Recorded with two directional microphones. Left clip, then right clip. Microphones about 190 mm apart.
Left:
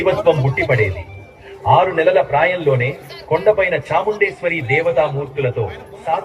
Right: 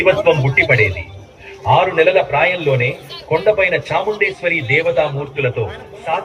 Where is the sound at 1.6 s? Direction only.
10° left (ahead or behind).